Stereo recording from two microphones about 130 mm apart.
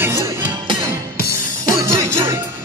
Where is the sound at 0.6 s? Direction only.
40° right (ahead or behind).